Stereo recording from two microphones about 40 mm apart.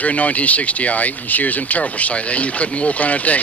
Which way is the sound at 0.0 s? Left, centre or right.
Left.